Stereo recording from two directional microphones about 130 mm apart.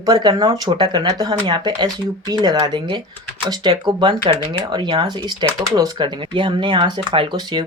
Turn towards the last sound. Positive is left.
turn(degrees=-35)  # may be behind; listen again after turning